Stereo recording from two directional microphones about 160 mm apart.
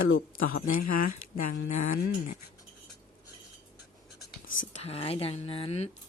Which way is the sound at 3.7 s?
75° left (ahead or behind).